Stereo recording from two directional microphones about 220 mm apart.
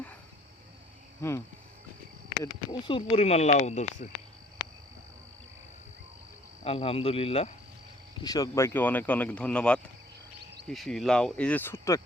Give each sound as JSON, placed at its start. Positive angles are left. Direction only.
{"t": 1.2, "sound": "speech", "side_deg": 10}
{"t": 2.4, "sound": "speech", "side_deg": 20}
{"t": 6.7, "sound": "speech", "side_deg": 25}
{"t": 8.2, "sound": "speech", "side_deg": 15}